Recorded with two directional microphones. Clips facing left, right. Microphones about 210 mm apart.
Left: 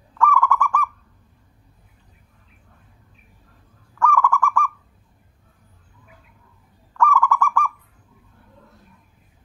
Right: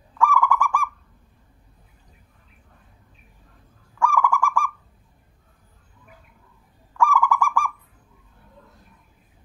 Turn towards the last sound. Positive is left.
turn(degrees=-10)  # may be behind; listen again after turning